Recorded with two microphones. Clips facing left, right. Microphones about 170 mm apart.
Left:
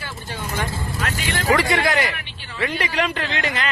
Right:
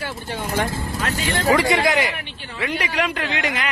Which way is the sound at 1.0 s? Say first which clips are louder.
Right 2 dB; 30° right (ahead or behind).